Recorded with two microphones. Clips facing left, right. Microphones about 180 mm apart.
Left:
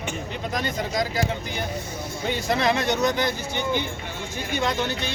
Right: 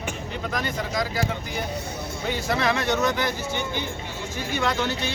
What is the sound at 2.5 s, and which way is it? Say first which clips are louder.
Speech: left 1 dB; 15° left (ahead or behind).